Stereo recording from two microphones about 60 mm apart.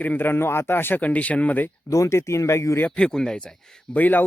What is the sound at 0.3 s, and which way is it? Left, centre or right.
Speech, left.